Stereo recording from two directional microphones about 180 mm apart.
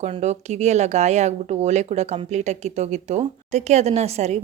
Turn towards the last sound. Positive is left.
turn(degrees=-35)  # may be behind; listen again after turning